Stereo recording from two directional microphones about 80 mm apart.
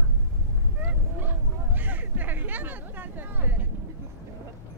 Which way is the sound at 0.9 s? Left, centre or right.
Right.